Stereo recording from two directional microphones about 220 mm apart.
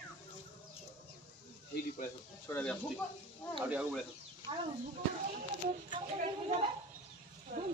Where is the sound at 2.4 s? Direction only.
5° left (ahead or behind).